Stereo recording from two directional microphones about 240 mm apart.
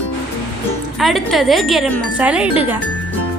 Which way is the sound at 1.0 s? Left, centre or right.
Centre.